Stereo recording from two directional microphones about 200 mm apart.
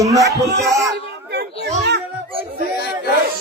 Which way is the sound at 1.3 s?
55° right (ahead or behind).